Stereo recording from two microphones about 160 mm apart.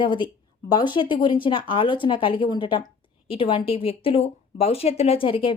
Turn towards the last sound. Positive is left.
turn(degrees=35)  # may be behind; listen again after turning